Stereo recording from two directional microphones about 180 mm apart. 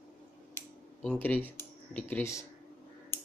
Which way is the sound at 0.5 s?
10° left (ahead or behind).